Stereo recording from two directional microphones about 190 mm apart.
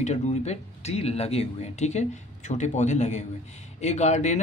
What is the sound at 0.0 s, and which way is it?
Speech, 35° left (ahead or behind).